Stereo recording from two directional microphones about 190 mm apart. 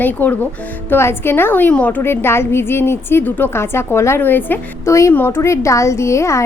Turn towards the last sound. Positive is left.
turn(degrees=15)  # may be behind; listen again after turning